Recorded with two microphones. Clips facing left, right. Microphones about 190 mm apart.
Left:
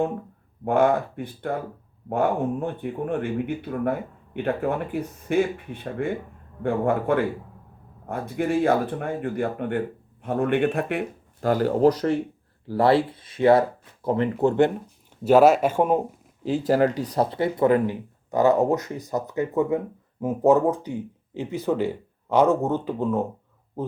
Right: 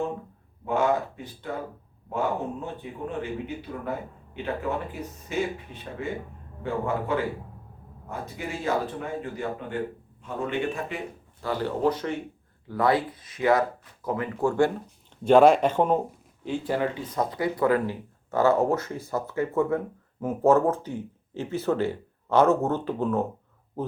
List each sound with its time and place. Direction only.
0.6 s speech: 55° left (ahead or behind); by 14.7 s 20° left (ahead or behind)
15.2 s speech: 5° left (ahead or behind)
16.4 s speech: 40° left (ahead or behind); by 23.2 s 10° left (ahead or behind)